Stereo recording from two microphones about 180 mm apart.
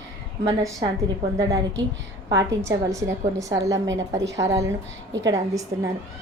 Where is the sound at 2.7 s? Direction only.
20° right (ahead or behind).